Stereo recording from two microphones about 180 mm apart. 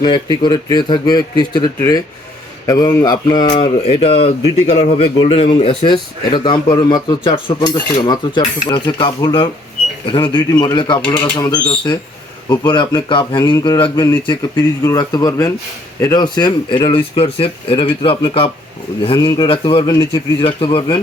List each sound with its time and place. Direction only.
0.4 s a man's voice: 25° left (ahead or behind)